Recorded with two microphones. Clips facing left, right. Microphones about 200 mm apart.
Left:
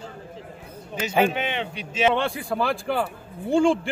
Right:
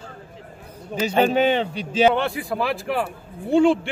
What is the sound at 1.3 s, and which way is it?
Speech, 35° right (ahead or behind).